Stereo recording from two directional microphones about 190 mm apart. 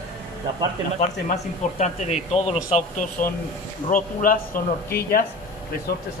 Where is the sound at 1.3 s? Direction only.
35° left (ahead or behind).